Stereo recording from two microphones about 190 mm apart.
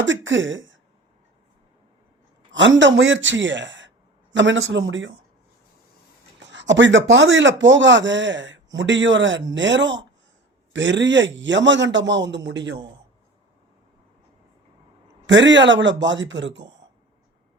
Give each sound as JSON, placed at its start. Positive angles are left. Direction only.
{"t": 0.0, "sound": "speech", "side_deg": -80}
{"t": 2.5, "sound": "speech", "side_deg": -75}
{"t": 6.4, "sound": "speech", "side_deg": -70}
{"t": 15.3, "sound": "speech", "side_deg": -70}